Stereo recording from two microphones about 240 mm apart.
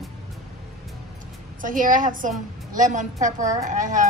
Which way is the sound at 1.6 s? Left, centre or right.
Right.